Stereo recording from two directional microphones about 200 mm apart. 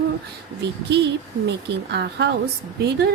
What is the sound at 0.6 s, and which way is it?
A woman's voice, 60° right (ahead or behind).